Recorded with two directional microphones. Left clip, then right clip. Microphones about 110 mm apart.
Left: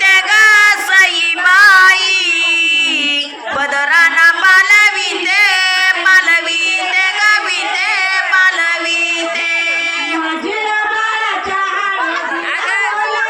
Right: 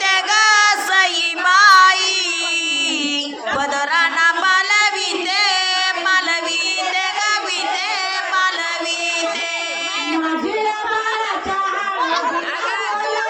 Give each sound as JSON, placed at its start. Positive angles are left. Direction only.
{"t": 0.0, "sound": "child singing", "side_deg": -55}
{"t": 3.9, "sound": "music", "side_deg": -40}
{"t": 5.3, "sound": "child singing", "side_deg": -40}
{"t": 6.9, "sound": "music", "side_deg": -30}